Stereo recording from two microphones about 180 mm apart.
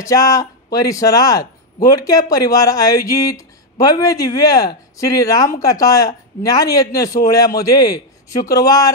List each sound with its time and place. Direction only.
0.0 s speech: 20° left (ahead or behind)